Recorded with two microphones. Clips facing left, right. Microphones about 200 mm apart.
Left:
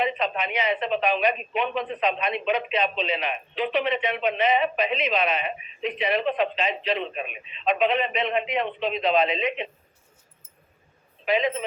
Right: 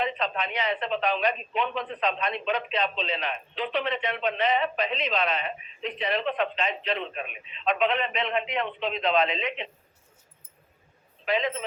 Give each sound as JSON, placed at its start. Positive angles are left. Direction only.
{"t": 0.0, "sound": "a man's voice", "side_deg": 15}
{"t": 11.3, "sound": "speech", "side_deg": 15}